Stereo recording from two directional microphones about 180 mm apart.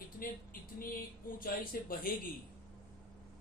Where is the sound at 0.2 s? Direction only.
50° left (ahead or behind).